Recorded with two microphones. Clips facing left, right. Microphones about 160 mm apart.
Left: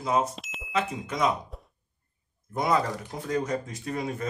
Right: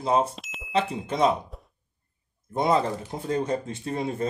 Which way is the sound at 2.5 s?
25° right (ahead or behind).